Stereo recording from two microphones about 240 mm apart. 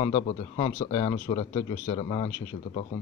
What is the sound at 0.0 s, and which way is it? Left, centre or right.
Speech, left.